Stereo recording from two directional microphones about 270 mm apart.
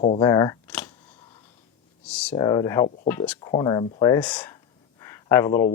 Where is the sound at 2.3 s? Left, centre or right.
Centre.